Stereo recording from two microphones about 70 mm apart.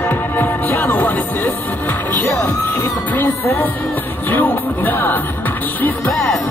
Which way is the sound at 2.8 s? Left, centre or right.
Left.